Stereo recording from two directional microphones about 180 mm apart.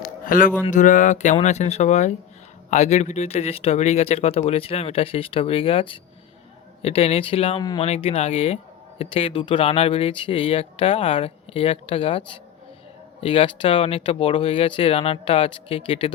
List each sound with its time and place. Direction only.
0.3 s speech: 50° left (ahead or behind); by 12.2 s 30° left (ahead or behind)
13.2 s speech: 30° left (ahead or behind)